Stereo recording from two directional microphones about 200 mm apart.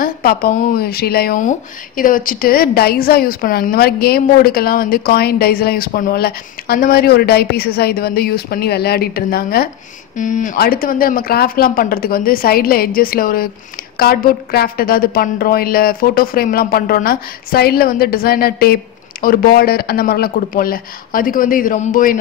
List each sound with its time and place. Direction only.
0.0 s a woman's voice: 45° left (ahead or behind)